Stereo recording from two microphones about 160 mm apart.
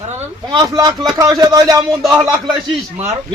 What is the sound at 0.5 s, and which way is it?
A man's voice, 25° right (ahead or behind).